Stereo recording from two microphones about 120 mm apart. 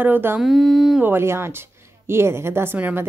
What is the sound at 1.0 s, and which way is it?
A woman's voice, 20° right (ahead or behind).